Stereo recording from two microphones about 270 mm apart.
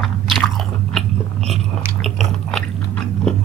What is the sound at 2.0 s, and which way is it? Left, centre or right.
Chewing, centre.